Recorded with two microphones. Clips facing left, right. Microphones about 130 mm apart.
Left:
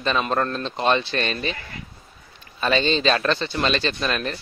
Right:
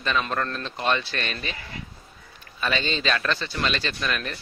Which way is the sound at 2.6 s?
30° left (ahead or behind).